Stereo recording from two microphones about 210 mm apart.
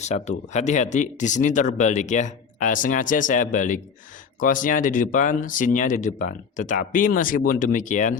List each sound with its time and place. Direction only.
0.0 s speech: 35° left (ahead or behind)